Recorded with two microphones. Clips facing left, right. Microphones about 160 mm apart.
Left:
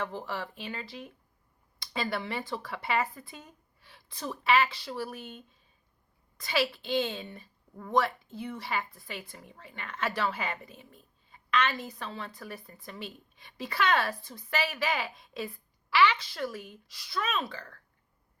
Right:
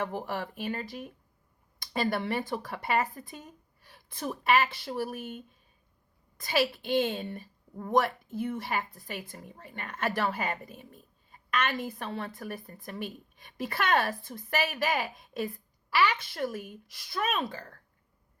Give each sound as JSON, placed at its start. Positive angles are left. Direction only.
{"t": 0.3, "sound": "a woman's voice", "side_deg": -50}
{"t": 3.8, "sound": "a sound", "side_deg": -45}
{"t": 4.4, "sound": "a woman's voice", "side_deg": -50}